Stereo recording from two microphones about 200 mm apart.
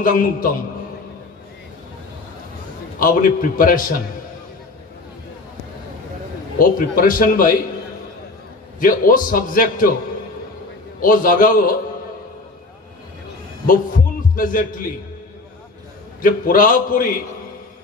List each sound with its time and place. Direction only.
0.0 s a man's voice: 45° left (ahead or behind)
3.0 s a man's voice: 45° left (ahead or behind)
6.6 s a man's voice: 45° left (ahead or behind)
8.7 s a man's voice: 45° left (ahead or behind)
11.0 s a man's voice: 45° left (ahead or behind)
13.7 s heart sounds: 45° left (ahead or behind)
16.2 s a man's voice: 45° left (ahead or behind)